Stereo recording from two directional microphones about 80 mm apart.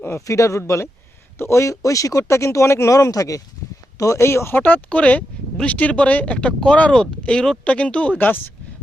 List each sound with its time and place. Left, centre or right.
0.0 s speech: left
4.6 s speech: centre